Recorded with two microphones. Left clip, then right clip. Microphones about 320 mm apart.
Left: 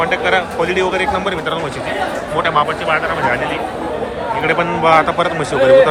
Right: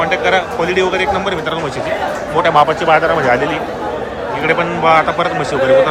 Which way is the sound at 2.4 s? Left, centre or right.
Centre.